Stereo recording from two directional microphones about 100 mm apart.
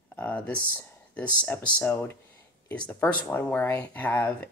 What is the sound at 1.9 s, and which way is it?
Speech, 25° left (ahead or behind).